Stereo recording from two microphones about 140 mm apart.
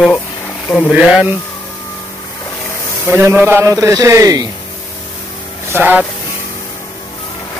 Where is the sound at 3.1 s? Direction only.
15° right (ahead or behind).